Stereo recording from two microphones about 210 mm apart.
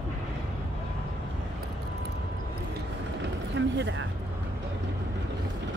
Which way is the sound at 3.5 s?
60° right (ahead or behind).